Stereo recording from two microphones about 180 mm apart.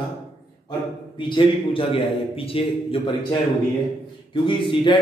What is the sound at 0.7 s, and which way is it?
A man's voice, 25° left (ahead or behind).